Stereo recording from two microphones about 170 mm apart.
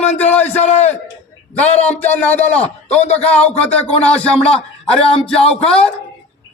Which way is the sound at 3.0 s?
40° left (ahead or behind).